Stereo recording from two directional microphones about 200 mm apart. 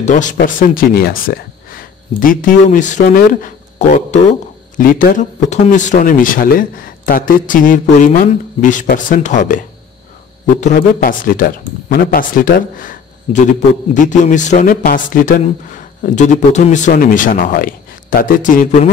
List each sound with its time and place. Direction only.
0.0 s a man's voice: 40° left (ahead or behind)